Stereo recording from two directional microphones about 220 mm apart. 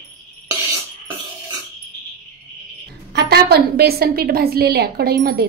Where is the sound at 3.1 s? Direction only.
45° right (ahead or behind).